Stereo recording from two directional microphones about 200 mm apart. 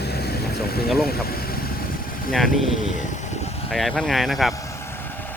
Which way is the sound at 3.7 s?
Centre (ahead or behind).